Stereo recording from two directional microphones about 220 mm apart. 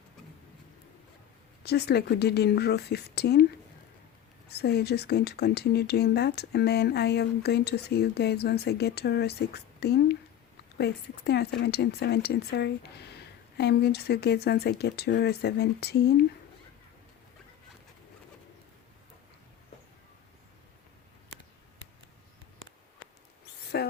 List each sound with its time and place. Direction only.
1.6 s speech: 50° left (ahead or behind)
4.4 s speech: 45° left (ahead or behind)
23.8 s a sound: 50° left (ahead or behind)